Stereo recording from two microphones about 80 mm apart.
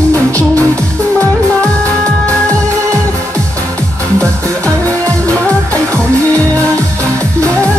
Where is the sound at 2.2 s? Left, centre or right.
Right.